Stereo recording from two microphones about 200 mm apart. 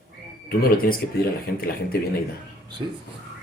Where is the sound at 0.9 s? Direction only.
50° left (ahead or behind).